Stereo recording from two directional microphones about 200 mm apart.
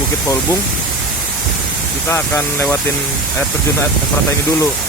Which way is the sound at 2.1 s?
10° left (ahead or behind).